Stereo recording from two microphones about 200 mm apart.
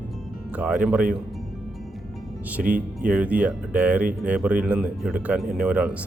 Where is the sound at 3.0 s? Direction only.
5° right (ahead or behind).